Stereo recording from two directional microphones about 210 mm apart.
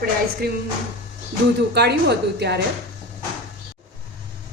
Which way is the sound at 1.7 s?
55° right (ahead or behind).